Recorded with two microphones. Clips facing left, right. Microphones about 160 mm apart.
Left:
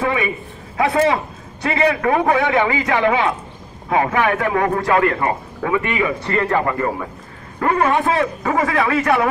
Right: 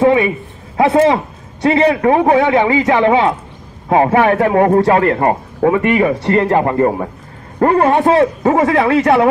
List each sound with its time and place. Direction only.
0.0 s a man's voice: 30° right (ahead or behind)